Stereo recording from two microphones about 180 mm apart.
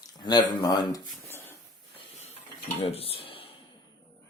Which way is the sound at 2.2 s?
35° left (ahead or behind).